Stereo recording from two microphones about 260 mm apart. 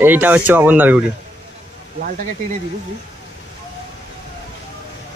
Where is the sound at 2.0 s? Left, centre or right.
Right.